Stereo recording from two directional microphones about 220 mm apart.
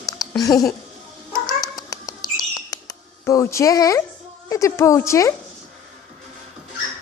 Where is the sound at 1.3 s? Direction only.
15° left (ahead or behind).